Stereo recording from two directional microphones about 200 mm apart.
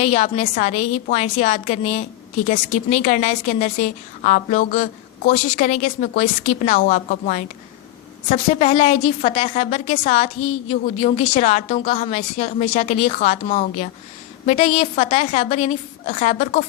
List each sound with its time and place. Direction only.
0.0 s a woman's voice: 35° left (ahead or behind)